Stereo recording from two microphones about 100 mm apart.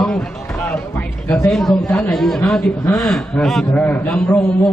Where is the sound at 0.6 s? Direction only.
20° left (ahead or behind).